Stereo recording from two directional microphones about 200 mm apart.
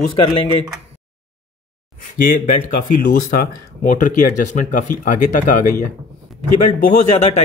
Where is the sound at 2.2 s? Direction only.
40° left (ahead or behind).